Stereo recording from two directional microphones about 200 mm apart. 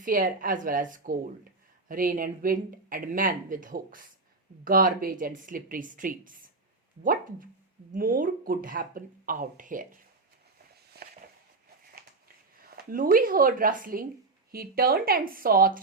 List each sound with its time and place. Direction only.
0.0 s speech: 45° right (ahead or behind)
10.9 s a sound: 50° right (ahead or behind)
12.5 s speech: 45° right (ahead or behind)